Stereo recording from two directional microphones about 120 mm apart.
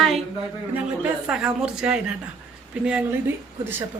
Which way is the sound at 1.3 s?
5° right (ahead or behind).